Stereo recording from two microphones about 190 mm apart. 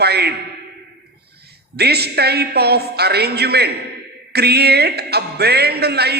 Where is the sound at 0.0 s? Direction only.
60° right (ahead or behind).